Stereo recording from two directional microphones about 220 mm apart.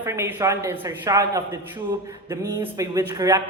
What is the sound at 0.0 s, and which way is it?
Speech, 10° right (ahead or behind).